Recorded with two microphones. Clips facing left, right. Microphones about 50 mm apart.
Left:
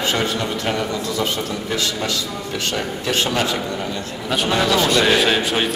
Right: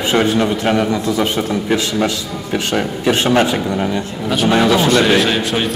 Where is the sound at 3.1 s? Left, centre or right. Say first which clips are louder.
Right 7 dB; right.